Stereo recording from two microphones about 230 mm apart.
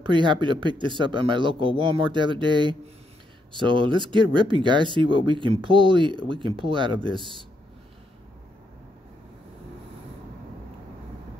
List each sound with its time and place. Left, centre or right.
0.0 s speech: right